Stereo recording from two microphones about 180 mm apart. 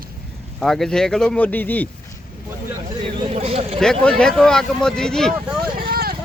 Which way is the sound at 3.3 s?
35° right (ahead or behind).